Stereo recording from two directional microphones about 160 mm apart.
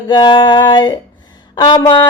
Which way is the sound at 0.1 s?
30° left (ahead or behind).